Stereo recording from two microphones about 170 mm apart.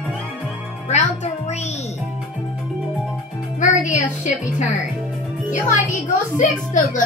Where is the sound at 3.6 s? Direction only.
45° left (ahead or behind).